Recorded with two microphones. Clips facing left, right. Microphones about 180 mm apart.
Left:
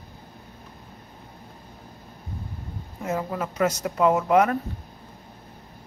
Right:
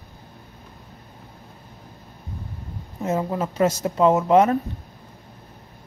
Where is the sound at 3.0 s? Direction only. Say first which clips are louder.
Right 4 dB; 25° right (ahead or behind).